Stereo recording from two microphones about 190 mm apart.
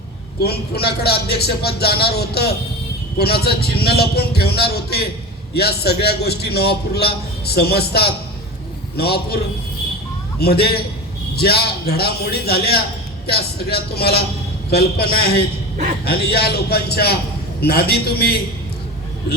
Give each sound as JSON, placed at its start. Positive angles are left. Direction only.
{"t": 0.4, "sound": "a man's voice", "side_deg": 55}
{"t": 10.4, "sound": "a man's voice", "side_deg": 55}